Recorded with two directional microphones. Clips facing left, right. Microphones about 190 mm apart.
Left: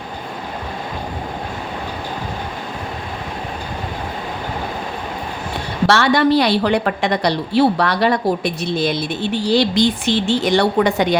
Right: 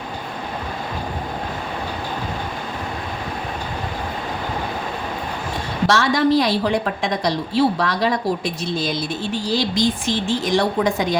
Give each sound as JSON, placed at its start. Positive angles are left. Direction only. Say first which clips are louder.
{"t": 5.9, "sound": "a woman's voice", "louder": "left 3 dB", "side_deg": 65}